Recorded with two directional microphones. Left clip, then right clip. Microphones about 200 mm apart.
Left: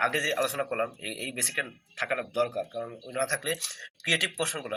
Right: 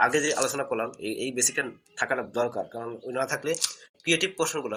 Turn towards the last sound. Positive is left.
turn(degrees=-15)  # may be behind; listen again after turning